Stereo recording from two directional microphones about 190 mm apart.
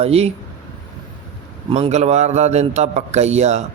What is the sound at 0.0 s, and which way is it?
Speech, 35° right (ahead or behind).